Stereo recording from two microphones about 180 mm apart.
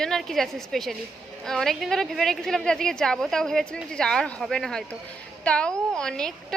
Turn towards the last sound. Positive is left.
turn(degrees=5)  # may be behind; listen again after turning